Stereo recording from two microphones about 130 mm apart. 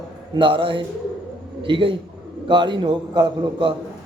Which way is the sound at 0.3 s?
40° right (ahead or behind).